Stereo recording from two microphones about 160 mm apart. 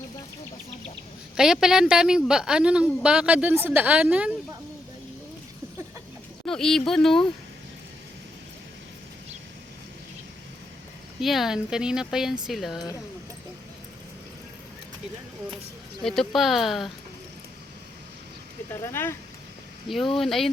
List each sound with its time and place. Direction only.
1.4 s a woman's voice: 5° right (ahead or behind)
6.4 s a woman's voice: 5° left (ahead or behind)
11.2 s a woman's voice: centre (ahead or behind)
16.0 s a woman's voice: centre (ahead or behind)
18.7 s speech: 15° left (ahead or behind)
20.1 s a woman's voice: centre (ahead or behind)